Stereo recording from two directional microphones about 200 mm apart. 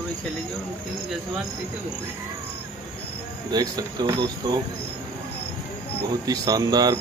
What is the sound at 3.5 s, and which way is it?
Speech, 20° right (ahead or behind).